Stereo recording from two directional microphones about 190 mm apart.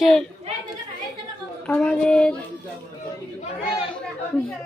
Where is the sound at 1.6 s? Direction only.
5° left (ahead or behind).